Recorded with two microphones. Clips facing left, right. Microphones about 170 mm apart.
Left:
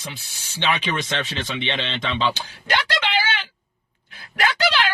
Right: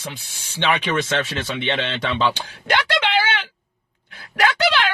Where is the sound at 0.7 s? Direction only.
65° right (ahead or behind).